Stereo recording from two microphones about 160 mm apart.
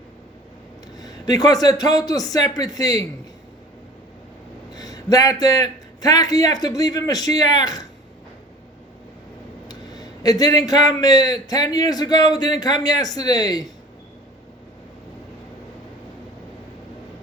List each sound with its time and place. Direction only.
0.9 s a man's voice: 25° left (ahead or behind)
4.7 s a man's voice: 25° left (ahead or behind)
9.6 s a man's voice: 25° left (ahead or behind)